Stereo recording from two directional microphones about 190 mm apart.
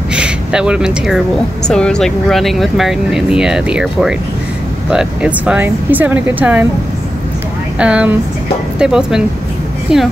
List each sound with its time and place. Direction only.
0.1 s speech: 5° right (ahead or behind)
7.8 s speech: 5° right (ahead or behind)